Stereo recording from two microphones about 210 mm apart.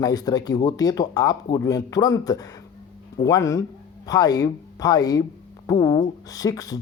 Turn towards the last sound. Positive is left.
turn(degrees=15)  # may be behind; listen again after turning